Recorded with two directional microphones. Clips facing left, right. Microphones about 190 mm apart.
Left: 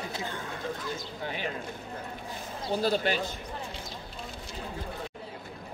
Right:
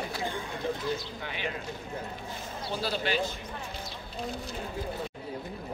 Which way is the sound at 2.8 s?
45° left (ahead or behind).